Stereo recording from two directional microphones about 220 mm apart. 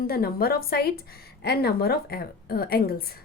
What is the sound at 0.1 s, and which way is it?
A woman's voice, 45° left (ahead or behind).